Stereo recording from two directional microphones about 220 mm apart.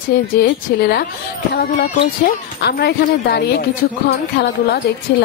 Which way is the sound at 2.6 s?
45° left (ahead or behind).